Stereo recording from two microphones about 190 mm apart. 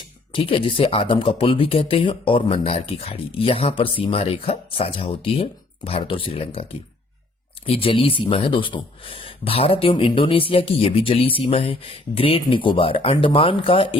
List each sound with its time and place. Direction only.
0.3 s speech: 30° left (ahead or behind)